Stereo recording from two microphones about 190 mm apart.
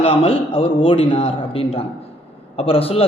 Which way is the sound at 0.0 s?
30° left (ahead or behind).